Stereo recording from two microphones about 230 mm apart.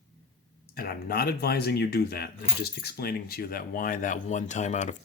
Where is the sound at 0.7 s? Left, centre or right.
Left.